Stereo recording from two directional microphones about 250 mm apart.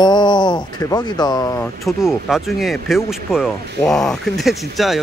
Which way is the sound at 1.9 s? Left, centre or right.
Centre.